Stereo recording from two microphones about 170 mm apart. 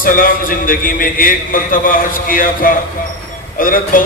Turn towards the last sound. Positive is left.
turn(degrees=55)  # may be behind; listen again after turning